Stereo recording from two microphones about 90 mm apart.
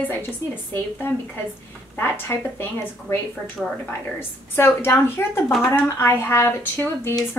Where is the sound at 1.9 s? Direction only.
25° left (ahead or behind).